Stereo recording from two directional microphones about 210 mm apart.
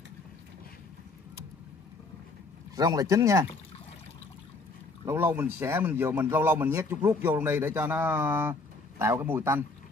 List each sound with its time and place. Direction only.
2.7 s speech: 15° right (ahead or behind)
5.0 s speech: 10° right (ahead or behind)